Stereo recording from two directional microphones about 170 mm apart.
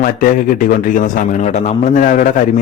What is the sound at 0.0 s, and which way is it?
A man's voice, 55° left (ahead or behind).